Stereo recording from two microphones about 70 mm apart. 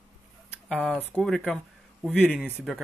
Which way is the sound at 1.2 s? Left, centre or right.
Centre.